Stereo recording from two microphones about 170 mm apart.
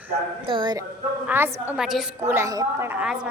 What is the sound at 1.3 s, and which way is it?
Speech, 10° right (ahead or behind).